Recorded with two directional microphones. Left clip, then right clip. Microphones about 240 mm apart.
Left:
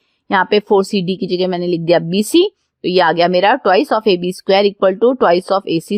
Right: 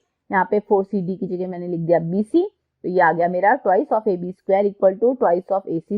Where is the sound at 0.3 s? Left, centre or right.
Left.